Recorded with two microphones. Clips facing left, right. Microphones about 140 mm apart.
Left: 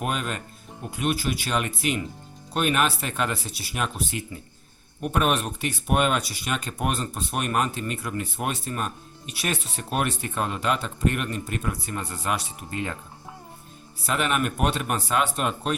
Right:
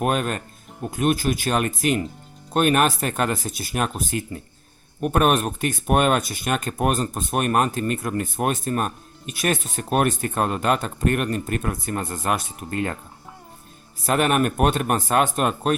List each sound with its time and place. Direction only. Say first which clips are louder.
0.0 s speech: right 6 dB; 50° right (ahead or behind)
14.1 s speech: right 5 dB; 50° right (ahead or behind)